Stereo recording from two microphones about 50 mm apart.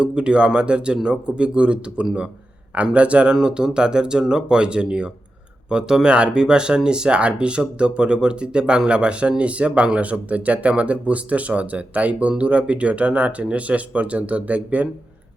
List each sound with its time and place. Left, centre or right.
0.0 s speech: right